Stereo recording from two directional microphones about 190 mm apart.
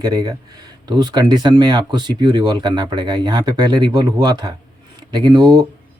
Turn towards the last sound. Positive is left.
turn(degrees=-20)  # may be behind; listen again after turning